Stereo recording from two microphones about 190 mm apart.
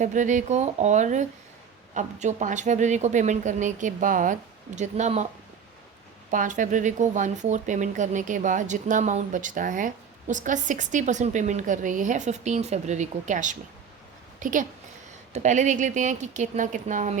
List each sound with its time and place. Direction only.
0.0 s speech: 40° right (ahead or behind)
6.3 s a woman's voice: 40° right (ahead or behind)